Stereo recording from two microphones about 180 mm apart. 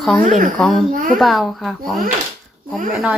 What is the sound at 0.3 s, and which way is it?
Speech, 45° right (ahead or behind).